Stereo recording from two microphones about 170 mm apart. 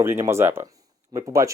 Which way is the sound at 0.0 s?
15° right (ahead or behind).